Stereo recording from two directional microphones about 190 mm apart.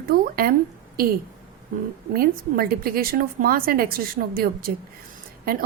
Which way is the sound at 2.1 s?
50° right (ahead or behind).